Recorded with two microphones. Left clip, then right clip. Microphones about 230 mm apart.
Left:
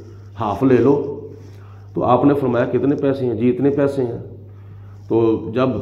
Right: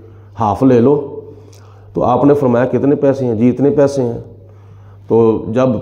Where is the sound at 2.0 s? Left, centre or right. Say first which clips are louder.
Right 4 dB; right.